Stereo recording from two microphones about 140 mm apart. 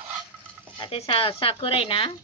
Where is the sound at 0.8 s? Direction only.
45° left (ahead or behind).